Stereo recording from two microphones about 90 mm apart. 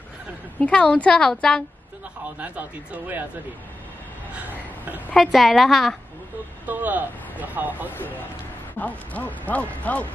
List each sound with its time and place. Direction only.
0.6 s speech: 15° left (ahead or behind)
2.3 s speech: 15° right (ahead or behind)
4.4 s a sound: 20° right (ahead or behind)
5.1 s a woman's voice: centre (ahead or behind)
6.6 s speech: 20° right (ahead or behind)
8.7 s speech: 20° left (ahead or behind)